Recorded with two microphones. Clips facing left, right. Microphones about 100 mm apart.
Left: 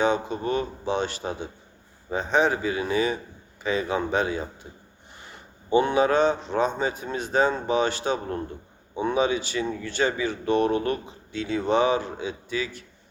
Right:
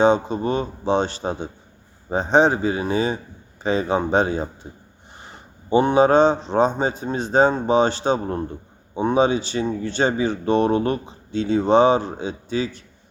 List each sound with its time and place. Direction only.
0.0 s a man's voice: 30° right (ahead or behind)